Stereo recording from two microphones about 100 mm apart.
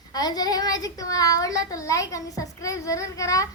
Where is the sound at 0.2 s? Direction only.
40° left (ahead or behind).